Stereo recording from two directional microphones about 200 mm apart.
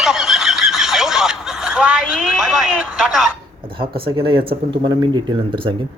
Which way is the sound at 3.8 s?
25° right (ahead or behind).